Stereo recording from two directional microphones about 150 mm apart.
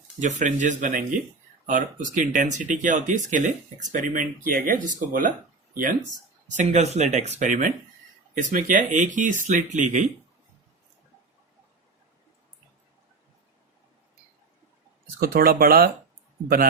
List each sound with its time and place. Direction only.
0.2 s speech: 55° right (ahead or behind)
6.6 s speech: 50° right (ahead or behind)
15.2 s speech: 80° right